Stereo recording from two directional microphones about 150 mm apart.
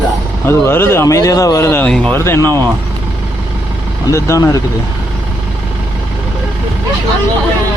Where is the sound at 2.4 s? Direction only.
25° right (ahead or behind).